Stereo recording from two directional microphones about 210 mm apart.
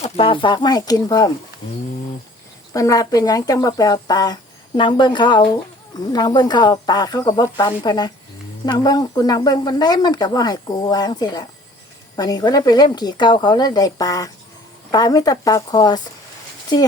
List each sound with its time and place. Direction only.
0.0 s speech: 25° left (ahead or behind)
2.7 s speech: 15° left (ahead or behind)